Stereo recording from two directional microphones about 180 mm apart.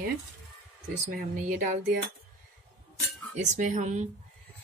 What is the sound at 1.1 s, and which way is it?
Speech, 50° right (ahead or behind).